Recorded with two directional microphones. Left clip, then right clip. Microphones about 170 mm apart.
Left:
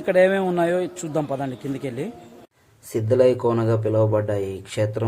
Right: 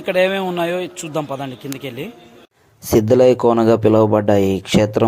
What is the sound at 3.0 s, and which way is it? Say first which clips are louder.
Speech: right 6 dB; 45° right (ahead or behind).